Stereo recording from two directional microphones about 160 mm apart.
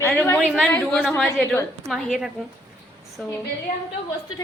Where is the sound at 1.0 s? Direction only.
Centre (ahead or behind).